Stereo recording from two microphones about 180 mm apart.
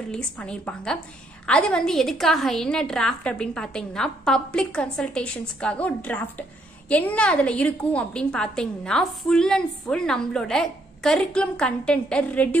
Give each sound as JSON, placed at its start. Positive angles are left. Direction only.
{"t": 0.1, "sound": "a woman's voice", "side_deg": 5}